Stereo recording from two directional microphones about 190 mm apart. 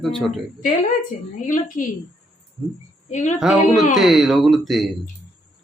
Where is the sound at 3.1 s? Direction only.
40° left (ahead or behind).